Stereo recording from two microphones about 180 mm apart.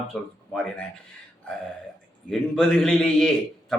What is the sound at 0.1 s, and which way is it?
Speech, 5° left (ahead or behind).